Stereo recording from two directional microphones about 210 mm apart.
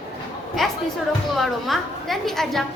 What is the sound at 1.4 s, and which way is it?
A woman's voice, centre (ahead or behind).